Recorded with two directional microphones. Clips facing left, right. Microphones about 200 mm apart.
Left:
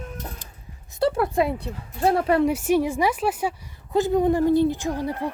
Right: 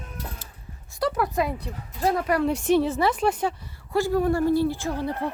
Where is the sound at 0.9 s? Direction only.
30° left (ahead or behind).